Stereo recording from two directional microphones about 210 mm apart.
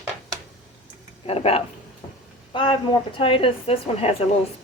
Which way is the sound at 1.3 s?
30° left (ahead or behind).